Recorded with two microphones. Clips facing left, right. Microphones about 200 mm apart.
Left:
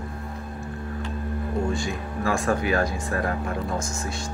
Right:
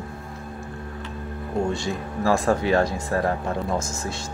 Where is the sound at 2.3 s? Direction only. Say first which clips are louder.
Right 3 dB; 30° right (ahead or behind).